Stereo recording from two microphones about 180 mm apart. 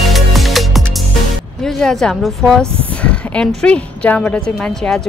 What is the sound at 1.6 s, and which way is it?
A woman's voice, 5° left (ahead or behind).